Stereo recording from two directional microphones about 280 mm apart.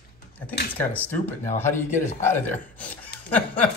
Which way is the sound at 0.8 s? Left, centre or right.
Centre.